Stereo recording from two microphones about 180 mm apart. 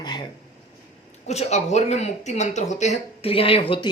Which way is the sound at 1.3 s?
35° left (ahead or behind).